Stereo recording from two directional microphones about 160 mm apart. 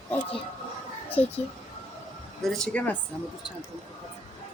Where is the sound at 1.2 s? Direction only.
45° left (ahead or behind).